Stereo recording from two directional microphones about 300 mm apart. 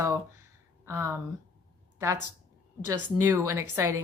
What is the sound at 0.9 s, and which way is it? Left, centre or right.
Speech, centre.